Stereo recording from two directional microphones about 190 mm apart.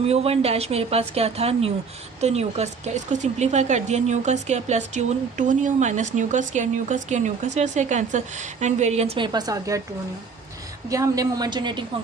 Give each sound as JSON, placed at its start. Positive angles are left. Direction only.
{"t": 0.1, "sound": "speech", "side_deg": -30}
{"t": 10.8, "sound": "a woman's voice", "side_deg": -15}